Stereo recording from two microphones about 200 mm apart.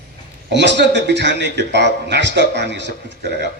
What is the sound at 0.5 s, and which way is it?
A man's voice, 60° right (ahead or behind).